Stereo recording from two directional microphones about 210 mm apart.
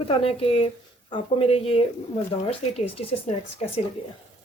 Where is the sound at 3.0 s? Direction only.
30° left (ahead or behind).